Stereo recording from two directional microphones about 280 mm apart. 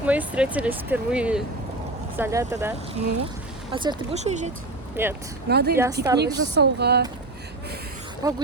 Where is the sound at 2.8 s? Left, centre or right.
Right.